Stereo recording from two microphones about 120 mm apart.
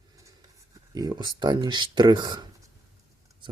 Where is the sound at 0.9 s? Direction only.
35° right (ahead or behind).